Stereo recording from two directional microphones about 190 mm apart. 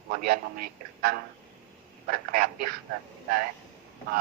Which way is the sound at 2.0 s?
50° right (ahead or behind).